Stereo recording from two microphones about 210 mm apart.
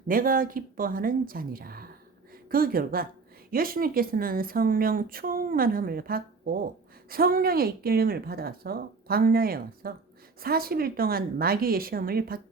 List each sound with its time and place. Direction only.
0.1 s speech: 40° right (ahead or behind)